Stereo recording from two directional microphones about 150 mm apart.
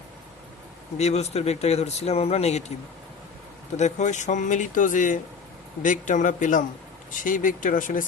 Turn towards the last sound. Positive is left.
turn(degrees=60)  # may be behind; listen again after turning